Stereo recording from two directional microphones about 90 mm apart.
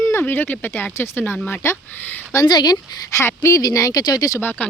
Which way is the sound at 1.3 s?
10° left (ahead or behind).